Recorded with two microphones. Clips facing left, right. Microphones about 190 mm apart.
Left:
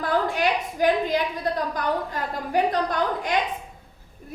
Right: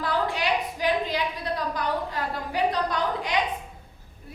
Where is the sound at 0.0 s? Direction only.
50° left (ahead or behind).